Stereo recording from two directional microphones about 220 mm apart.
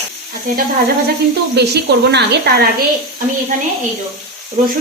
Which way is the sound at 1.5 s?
50° right (ahead or behind).